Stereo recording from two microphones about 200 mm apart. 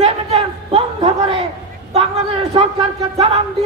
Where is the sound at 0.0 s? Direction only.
30° right (ahead or behind).